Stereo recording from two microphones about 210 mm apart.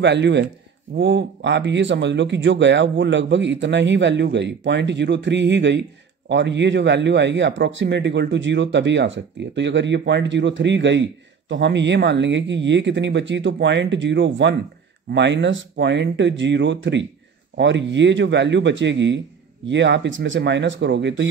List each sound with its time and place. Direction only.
0.0 s speech: 55° right (ahead or behind)